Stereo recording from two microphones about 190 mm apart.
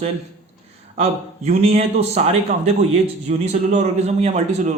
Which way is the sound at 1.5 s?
35° right (ahead or behind).